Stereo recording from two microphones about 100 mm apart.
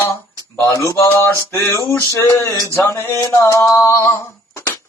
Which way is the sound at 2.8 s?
30° left (ahead or behind).